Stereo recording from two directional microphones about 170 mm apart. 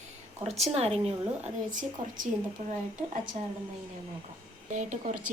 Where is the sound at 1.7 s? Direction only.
50° right (ahead or behind).